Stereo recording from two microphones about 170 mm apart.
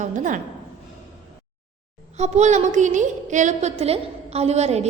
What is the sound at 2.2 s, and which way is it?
A woman's voice, 45° right (ahead or behind).